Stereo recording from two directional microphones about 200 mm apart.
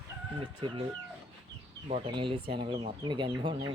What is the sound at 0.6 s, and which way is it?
Speech, 25° right (ahead or behind).